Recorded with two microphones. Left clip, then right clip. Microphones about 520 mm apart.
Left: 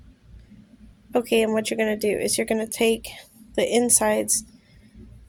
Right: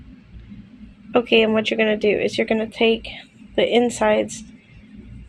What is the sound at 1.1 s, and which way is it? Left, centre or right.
Speech, left.